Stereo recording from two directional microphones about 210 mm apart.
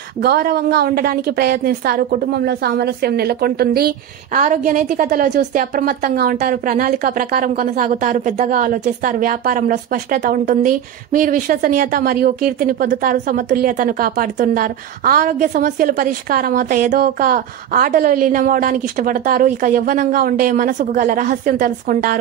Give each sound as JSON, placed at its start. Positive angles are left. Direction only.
{"t": 0.2, "sound": "a woman's voice", "side_deg": -50}